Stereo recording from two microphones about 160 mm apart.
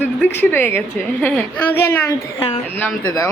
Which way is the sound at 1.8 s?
20° left (ahead or behind).